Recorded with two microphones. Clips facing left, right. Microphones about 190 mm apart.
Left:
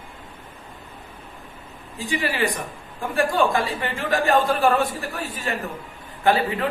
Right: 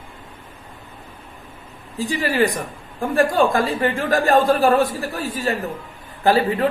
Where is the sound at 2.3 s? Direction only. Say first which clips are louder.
Right 6 dB; 40° right (ahead or behind).